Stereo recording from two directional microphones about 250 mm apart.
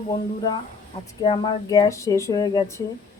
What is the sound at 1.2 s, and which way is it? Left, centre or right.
Speech, centre.